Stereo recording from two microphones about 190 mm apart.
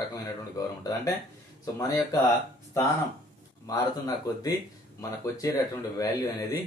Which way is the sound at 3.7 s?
20° left (ahead or behind).